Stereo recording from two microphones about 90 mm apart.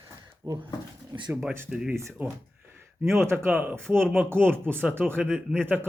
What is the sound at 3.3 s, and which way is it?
Speech, 25° right (ahead or behind).